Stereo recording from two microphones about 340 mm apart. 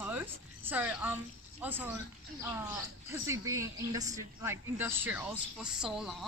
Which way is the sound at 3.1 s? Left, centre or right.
Centre.